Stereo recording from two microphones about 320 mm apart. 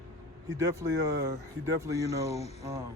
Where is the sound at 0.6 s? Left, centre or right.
Centre.